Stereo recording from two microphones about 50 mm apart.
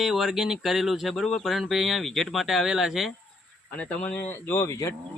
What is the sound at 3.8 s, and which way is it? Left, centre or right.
Speech, left.